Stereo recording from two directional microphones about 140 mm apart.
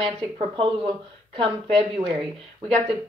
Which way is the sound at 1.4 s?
40° right (ahead or behind).